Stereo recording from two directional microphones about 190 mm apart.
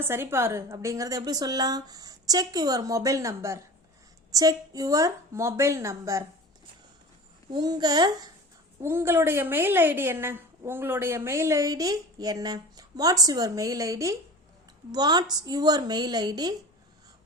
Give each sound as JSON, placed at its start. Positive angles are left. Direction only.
{"t": 0.0, "sound": "a woman's voice", "side_deg": -15}
{"t": 7.5, "sound": "a woman's voice", "side_deg": -20}